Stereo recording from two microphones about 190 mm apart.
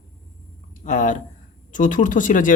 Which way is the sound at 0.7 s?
40° left (ahead or behind).